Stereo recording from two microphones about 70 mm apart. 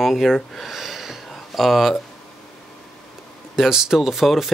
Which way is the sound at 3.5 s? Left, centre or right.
Centre.